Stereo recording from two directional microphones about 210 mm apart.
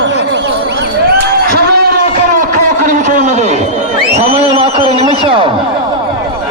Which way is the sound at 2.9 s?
35° right (ahead or behind).